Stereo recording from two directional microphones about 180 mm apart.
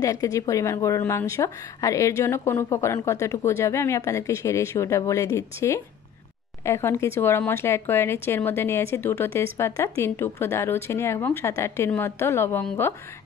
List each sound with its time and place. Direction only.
0.0 s speech: 20° left (ahead or behind)